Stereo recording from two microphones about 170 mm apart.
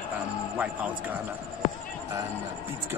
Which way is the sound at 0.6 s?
10° right (ahead or behind).